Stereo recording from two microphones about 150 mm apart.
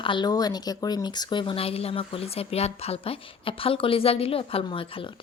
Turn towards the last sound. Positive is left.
turn(degrees=35)  # may be behind; listen again after turning